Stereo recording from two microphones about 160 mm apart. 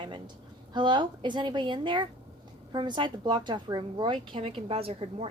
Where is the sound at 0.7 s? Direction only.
30° right (ahead or behind).